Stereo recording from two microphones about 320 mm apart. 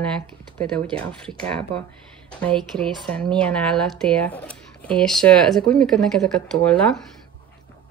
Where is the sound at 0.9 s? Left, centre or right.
Centre.